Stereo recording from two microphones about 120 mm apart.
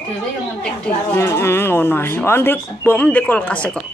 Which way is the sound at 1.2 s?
20° left (ahead or behind).